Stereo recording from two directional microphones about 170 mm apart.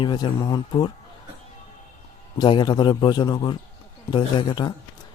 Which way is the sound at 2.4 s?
25° left (ahead or behind).